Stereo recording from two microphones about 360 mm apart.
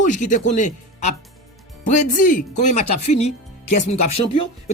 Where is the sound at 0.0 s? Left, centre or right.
Left.